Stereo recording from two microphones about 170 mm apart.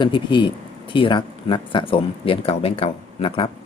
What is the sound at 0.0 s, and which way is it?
Speech, 30° left (ahead or behind).